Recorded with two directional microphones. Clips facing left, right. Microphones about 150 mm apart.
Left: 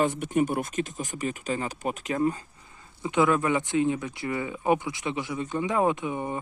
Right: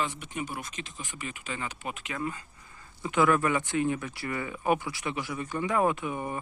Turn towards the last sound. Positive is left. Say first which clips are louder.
# left 2 dB
turn(degrees=20)  # may be behind; listen again after turning